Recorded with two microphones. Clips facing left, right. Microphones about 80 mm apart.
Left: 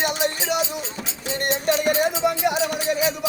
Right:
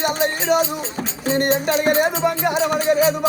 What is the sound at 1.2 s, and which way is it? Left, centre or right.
Music, right.